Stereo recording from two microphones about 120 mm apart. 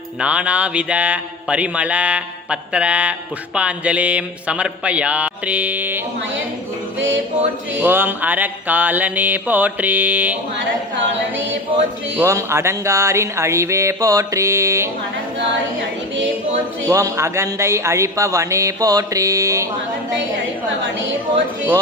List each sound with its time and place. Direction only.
0.2 s speech: 10° right (ahead or behind)
7.8 s speech: 15° right (ahead or behind)
12.2 s speech: 25° right (ahead or behind)
16.8 s speech: 25° right (ahead or behind)